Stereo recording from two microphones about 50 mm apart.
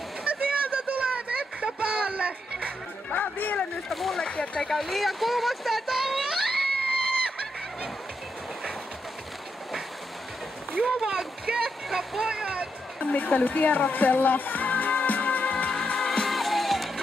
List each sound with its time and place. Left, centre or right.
0.2 s a sound: right
3.1 s a sound: left
3.9 s speech: centre
10.8 s splash: centre
12.0 s speech: centre
12.3 s vehicle: right
13.0 s music: left
15.7 s music: centre
16.3 s music: centre